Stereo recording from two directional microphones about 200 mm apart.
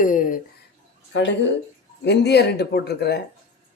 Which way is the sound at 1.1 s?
65° left (ahead or behind).